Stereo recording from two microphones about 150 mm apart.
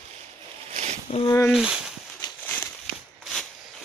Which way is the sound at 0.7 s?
50° right (ahead or behind).